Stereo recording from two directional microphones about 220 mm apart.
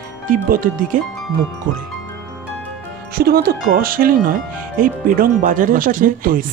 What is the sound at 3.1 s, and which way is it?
Speech, 45° right (ahead or behind).